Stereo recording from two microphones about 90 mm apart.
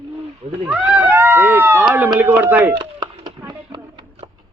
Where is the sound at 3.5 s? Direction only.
55° right (ahead or behind).